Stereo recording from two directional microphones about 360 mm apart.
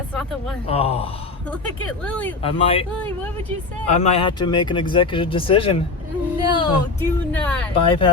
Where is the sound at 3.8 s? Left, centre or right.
Centre.